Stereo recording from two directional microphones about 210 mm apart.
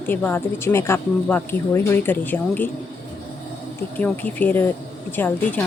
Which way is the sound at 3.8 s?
10° left (ahead or behind).